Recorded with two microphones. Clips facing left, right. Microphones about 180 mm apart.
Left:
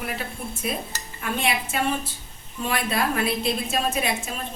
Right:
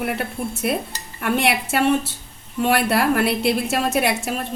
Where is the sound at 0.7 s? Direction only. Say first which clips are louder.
Right 5 dB; 70° right (ahead or behind).